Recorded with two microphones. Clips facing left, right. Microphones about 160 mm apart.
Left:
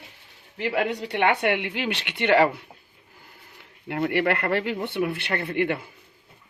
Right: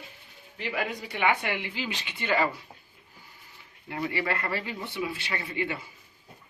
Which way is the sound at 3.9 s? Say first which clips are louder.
Left 7 dB; 65° left (ahead or behind).